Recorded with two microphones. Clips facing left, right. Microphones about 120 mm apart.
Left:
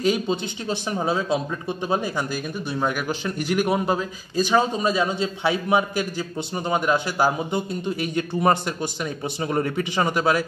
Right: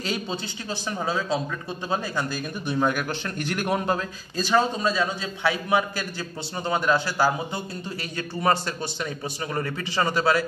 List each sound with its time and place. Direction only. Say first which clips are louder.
0.0 s a man's voice: left 7 dB; 10° left (ahead or behind)
2.7 s a man's voice: right 1 dB; 5° left (ahead or behind)